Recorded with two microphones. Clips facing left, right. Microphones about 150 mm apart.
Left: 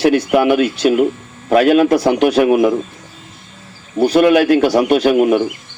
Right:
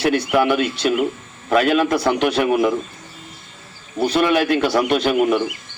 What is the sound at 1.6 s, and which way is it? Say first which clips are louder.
Speech: left 6 dB; 40° left (ahead or behind).